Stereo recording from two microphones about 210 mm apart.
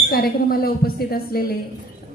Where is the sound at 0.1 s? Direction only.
45° left (ahead or behind).